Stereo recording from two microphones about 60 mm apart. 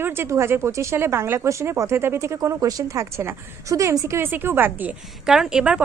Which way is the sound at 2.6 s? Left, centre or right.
Right.